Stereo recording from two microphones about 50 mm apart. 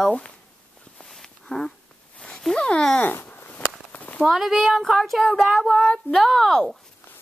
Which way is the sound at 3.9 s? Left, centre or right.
Left.